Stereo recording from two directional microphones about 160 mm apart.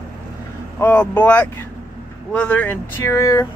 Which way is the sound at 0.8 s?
10° left (ahead or behind).